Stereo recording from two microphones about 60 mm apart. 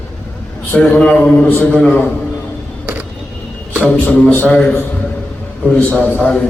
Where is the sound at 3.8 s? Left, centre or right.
Left.